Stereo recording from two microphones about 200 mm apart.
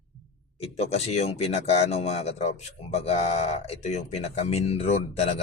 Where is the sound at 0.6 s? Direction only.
30° left (ahead or behind).